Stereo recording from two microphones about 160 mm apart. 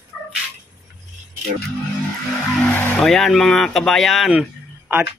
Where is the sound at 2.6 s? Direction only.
10° left (ahead or behind).